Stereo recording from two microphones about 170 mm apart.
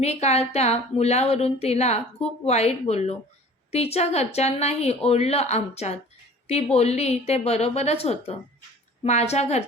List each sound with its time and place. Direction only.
0.0 s speech: 40° left (ahead or behind)